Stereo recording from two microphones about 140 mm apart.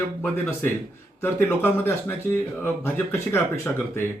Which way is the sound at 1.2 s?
15° left (ahead or behind).